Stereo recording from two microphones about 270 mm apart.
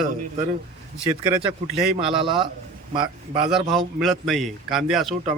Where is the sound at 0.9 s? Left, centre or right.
Centre.